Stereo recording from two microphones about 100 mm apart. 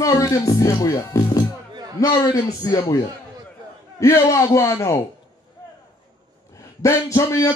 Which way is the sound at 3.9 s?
30° left (ahead or behind).